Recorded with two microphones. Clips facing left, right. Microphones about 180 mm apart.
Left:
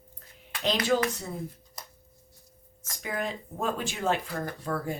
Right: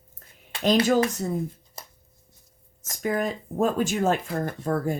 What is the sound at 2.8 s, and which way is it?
Speech, 45° right (ahead or behind).